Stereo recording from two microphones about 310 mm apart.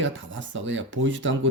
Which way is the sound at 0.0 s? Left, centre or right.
Right.